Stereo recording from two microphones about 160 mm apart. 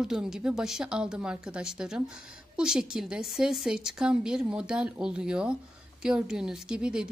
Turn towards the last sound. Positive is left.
turn(degrees=-5)  # may be behind; listen again after turning